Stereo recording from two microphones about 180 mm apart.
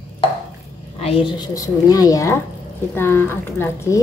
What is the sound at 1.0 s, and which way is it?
A woman's voice, 30° left (ahead or behind).